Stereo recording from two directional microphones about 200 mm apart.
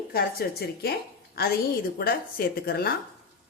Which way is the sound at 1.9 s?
50° left (ahead or behind).